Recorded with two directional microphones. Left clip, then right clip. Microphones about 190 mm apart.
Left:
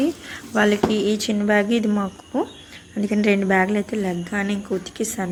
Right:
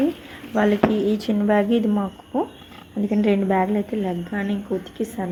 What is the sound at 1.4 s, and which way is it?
A woman's voice, 15° left (ahead or behind).